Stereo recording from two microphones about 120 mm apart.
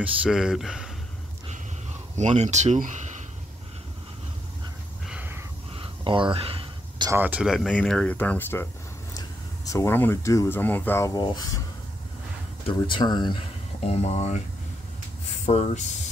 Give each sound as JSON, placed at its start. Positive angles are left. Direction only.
{"t": 0.0, "sound": "speech", "side_deg": -5}
{"t": 2.1, "sound": "speech", "side_deg": -70}
{"t": 5.8, "sound": "a sound", "side_deg": -45}
{"t": 7.1, "sound": "speech", "side_deg": -15}
{"t": 7.4, "sound": "speech", "side_deg": 5}
{"t": 9.1, "sound": "a sound", "side_deg": 30}
{"t": 10.3, "sound": "speech", "side_deg": 20}
{"t": 11.1, "sound": "speech", "side_deg": 35}
{"t": 12.6, "sound": "speech", "side_deg": 45}
{"t": 13.8, "sound": "speech", "side_deg": 65}
{"t": 15.4, "sound": "speech", "side_deg": 75}